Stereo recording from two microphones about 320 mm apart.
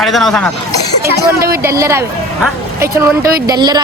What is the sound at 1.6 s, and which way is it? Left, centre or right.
A woman's voice, centre.